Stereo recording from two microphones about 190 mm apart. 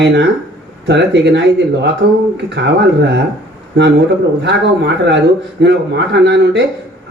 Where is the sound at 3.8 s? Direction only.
65° right (ahead or behind).